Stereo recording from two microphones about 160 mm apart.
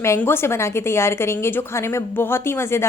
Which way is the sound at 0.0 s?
15° left (ahead or behind).